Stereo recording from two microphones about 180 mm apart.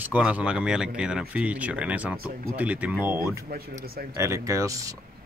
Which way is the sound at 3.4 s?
55° right (ahead or behind).